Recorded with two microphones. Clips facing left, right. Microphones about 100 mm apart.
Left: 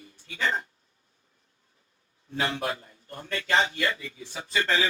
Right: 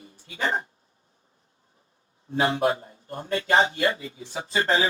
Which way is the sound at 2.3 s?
30° right (ahead or behind).